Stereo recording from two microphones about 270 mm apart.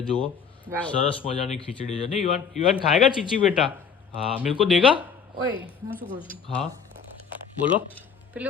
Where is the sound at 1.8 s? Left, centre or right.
Left.